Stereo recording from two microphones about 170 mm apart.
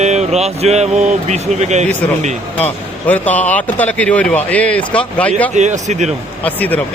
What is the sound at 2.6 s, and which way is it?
Speech, 10° left (ahead or behind).